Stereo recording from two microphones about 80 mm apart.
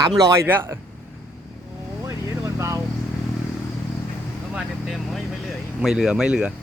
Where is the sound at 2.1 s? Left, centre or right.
Right.